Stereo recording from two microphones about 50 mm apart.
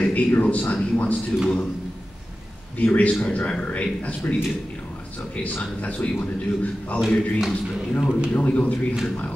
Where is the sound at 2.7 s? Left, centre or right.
Left.